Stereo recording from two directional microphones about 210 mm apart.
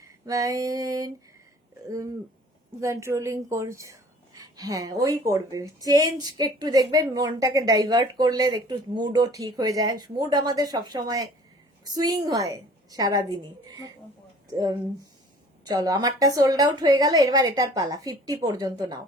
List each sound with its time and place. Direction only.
0.0 s female singing: 15° right (ahead or behind)
2.8 s a woman's voice: 15° right (ahead or behind)
15.6 s a woman's voice: 20° right (ahead or behind)